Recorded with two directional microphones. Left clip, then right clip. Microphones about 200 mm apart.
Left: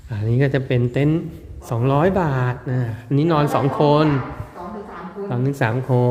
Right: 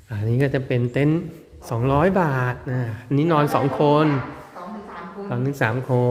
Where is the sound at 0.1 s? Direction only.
5° right (ahead or behind).